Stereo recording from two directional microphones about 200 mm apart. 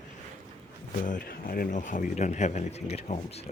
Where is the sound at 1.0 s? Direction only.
45° left (ahead or behind).